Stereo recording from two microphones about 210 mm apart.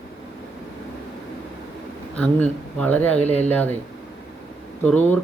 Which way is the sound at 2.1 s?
5° left (ahead or behind).